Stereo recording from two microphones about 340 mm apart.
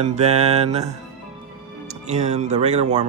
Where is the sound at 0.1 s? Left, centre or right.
Centre.